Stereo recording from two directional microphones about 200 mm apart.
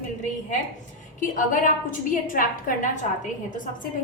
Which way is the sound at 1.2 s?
40° left (ahead or behind).